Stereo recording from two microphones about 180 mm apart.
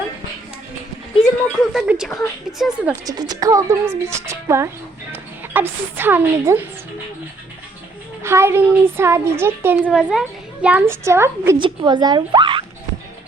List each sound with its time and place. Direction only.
1.7 s speech: centre (ahead or behind)
3.1 s a woman's voice: 20° right (ahead or behind)
8.2 s a woman's voice: 15° right (ahead or behind)
11.5 s speech: 25° right (ahead or behind)